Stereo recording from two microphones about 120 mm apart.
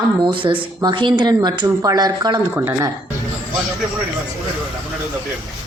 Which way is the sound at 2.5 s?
20° right (ahead or behind).